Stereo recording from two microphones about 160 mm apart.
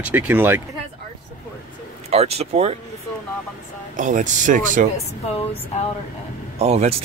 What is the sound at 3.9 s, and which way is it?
Speech, 50° right (ahead or behind).